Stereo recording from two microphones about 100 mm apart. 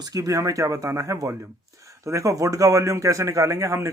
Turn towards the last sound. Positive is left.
turn(degrees=-30)  # may be behind; listen again after turning